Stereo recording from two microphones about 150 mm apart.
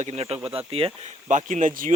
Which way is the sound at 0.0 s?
45° right (ahead or behind).